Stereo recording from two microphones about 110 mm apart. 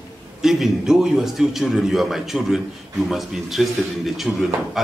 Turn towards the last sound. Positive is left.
turn(degrees=0)  # may be behind; listen again after turning